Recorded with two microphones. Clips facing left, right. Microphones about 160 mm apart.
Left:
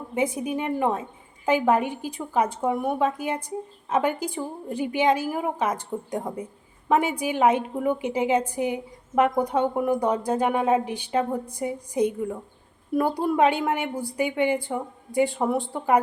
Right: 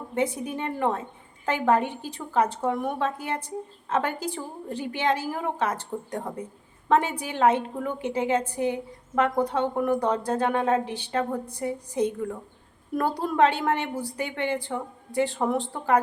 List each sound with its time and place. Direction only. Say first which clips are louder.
0.1 s a woman's voice: left 2 dB; 10° left (ahead or behind)